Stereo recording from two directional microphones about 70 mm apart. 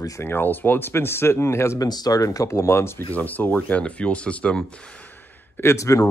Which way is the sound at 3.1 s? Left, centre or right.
Left.